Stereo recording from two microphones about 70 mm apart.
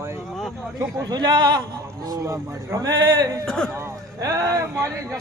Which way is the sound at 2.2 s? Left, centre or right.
Right.